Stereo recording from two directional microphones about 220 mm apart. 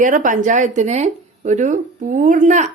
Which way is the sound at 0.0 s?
35° right (ahead or behind).